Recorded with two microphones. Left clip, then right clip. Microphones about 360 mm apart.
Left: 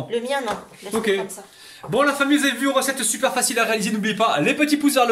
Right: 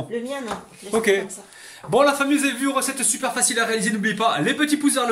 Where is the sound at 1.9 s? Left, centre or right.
Centre.